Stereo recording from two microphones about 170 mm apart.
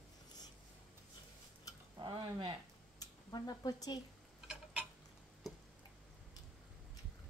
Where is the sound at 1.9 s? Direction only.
30° right (ahead or behind).